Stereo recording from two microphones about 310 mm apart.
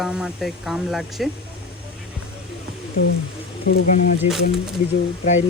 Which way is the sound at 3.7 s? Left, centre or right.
Left.